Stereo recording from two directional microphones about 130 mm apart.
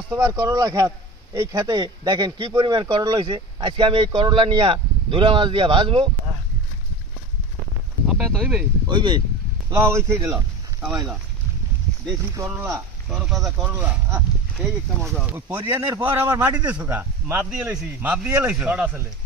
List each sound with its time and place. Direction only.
0.1 s speech: 25° right (ahead or behind); by 6.0 s 40° right (ahead or behind)
8.1 s speech: 5° right (ahead or behind)
8.8 s speech: 35° right (ahead or behind)
9.8 s speech: 20° right (ahead or behind)
12.5 s speech: 20° right (ahead or behind)
13.1 s a man's voice: 5° right (ahead or behind)
15.0 s speech: centre (ahead or behind)
15.3 s a man's voice: 15° right (ahead or behind)